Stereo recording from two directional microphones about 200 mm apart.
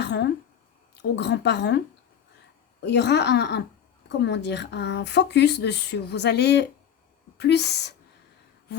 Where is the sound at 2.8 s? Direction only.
55° left (ahead or behind).